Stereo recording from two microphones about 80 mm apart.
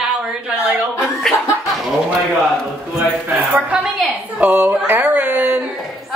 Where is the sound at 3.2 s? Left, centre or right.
Centre.